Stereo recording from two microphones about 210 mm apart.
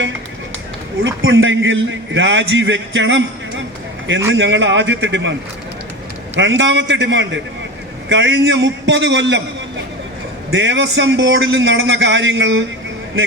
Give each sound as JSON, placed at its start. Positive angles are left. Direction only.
{"t": 1.0, "sound": "a man's voice", "side_deg": -65}
{"t": 6.3, "sound": "a man's voice", "side_deg": -60}
{"t": 10.5, "sound": "a man's voice", "side_deg": -60}